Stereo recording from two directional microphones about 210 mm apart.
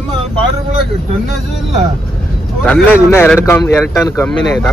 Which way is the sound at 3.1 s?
10° left (ahead or behind).